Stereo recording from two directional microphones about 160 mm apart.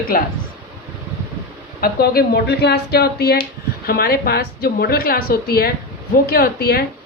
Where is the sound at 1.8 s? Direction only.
75° left (ahead or behind).